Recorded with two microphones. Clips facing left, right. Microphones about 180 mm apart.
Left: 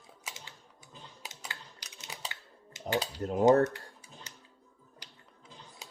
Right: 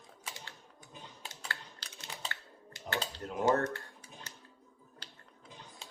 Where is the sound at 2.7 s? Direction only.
15° left (ahead or behind).